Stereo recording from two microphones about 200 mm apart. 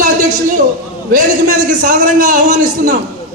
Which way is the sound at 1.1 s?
40° right (ahead or behind).